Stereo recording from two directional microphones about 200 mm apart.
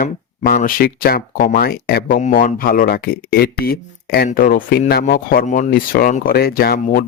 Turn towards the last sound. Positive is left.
turn(degrees=45)  # may be behind; listen again after turning